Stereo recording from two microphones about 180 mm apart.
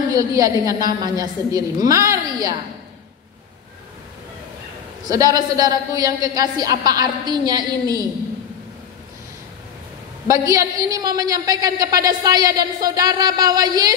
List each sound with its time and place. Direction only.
0.1 s a man's voice: 20° right (ahead or behind)
5.0 s a man's voice: 20° right (ahead or behind)
10.2 s a man's voice: 20° right (ahead or behind)